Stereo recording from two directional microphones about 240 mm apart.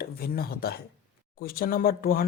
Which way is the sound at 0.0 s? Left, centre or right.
Left.